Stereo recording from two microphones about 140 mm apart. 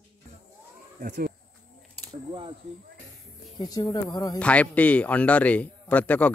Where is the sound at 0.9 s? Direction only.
80° right.